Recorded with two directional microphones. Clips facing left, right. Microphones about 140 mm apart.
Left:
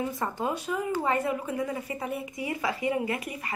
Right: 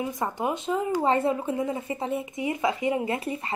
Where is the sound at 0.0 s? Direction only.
15° right (ahead or behind).